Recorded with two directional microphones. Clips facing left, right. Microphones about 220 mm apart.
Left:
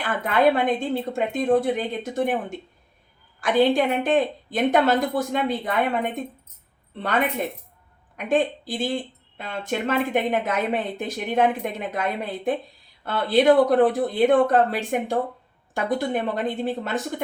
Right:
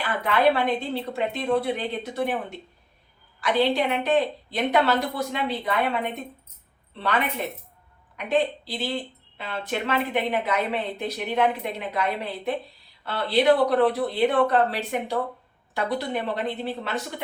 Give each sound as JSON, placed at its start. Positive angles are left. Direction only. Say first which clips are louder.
{"t": 0.3, "sound": "a woman's voice", "louder": "left 2 dB", "side_deg": 50}
{"t": 8.1, "sound": "a woman's voice", "louder": "left 2 dB", "side_deg": 50}